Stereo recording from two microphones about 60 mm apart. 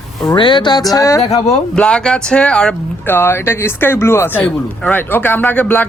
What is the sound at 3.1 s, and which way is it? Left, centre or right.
Speech, left.